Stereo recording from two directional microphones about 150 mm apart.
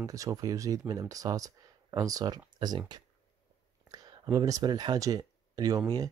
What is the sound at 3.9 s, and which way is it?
Speech, 25° right (ahead or behind).